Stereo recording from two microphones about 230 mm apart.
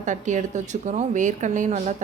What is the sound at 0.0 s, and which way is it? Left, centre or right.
A woman's voice, right.